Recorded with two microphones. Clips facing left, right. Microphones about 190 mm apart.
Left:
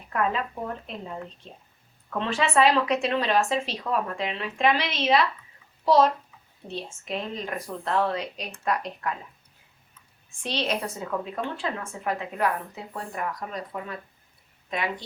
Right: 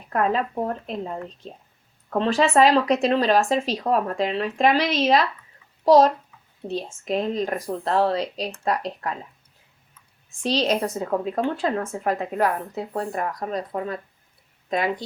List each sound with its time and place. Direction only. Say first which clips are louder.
0.1 s a woman's voice: right 4 dB; 40° right (ahead or behind)
10.4 s a woman's voice: right 6 dB; 35° right (ahead or behind)